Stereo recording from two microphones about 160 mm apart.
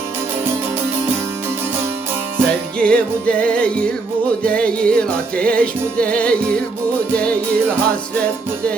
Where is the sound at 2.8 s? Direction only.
5° left (ahead or behind).